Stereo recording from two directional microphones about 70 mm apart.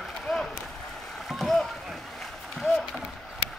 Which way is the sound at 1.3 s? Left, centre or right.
Centre.